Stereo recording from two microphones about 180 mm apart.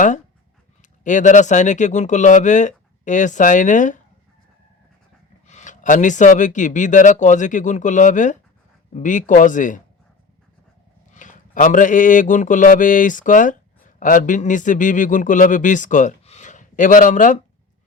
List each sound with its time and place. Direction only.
0.8 s a man's voice: 45° left (ahead or behind)
5.5 s a man's voice: 40° left (ahead or behind)
11.1 s a man's voice: 45° left (ahead or behind)